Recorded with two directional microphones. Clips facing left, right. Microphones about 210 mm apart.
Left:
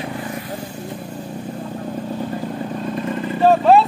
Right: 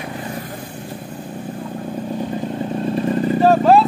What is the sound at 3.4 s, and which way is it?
Vehicle, centre (ahead or behind).